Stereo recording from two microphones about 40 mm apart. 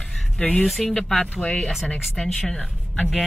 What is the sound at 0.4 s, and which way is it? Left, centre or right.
Speech, left.